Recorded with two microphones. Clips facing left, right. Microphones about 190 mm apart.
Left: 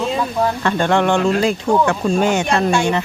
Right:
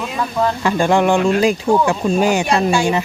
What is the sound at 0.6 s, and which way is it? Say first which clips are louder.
Speech: right 3 dB; 10° right (ahead or behind).